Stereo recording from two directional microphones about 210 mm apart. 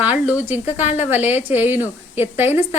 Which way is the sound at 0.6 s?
30° left (ahead or behind).